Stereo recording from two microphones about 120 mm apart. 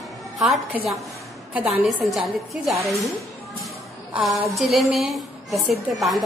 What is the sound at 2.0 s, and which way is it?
Speech, centre (ahead or behind).